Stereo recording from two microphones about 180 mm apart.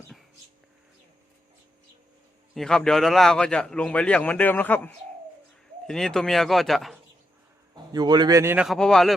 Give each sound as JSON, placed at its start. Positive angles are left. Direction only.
{"t": 2.6, "sound": "a man's voice", "side_deg": 5}
{"t": 7.9, "sound": "a man's voice", "side_deg": -25}
{"t": 8.6, "sound": "a man's voice", "side_deg": 0}